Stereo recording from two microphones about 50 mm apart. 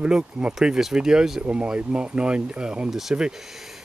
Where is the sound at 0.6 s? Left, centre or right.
Centre.